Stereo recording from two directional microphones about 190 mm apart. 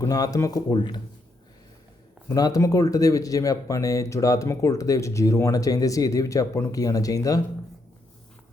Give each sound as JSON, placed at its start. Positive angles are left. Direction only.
{"t": 0.0, "sound": "speech", "side_deg": 20}
{"t": 2.3, "sound": "speech", "side_deg": 20}